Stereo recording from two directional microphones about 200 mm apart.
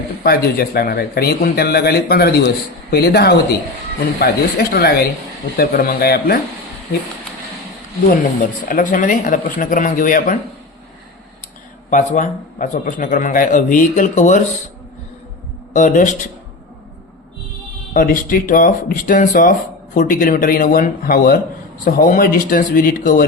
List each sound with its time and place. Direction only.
0.2 s speech: 50° left (ahead or behind)
8.6 s a man's voice: 40° left (ahead or behind)
11.9 s a man's voice: 40° left (ahead or behind)
15.7 s a man's voice: 40° left (ahead or behind)
17.9 s speech: 45° left (ahead or behind)